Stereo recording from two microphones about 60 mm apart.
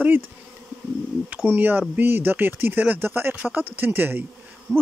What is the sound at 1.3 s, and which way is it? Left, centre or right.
Speech, right.